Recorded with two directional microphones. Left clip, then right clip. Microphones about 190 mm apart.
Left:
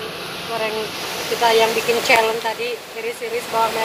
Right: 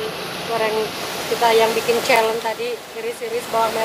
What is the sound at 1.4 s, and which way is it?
Speech, 5° right (ahead or behind).